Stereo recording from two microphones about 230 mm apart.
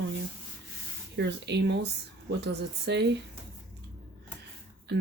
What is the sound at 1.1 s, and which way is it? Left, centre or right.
Speech, right.